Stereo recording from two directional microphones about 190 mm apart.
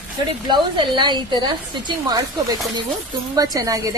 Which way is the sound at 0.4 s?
25° right (ahead or behind).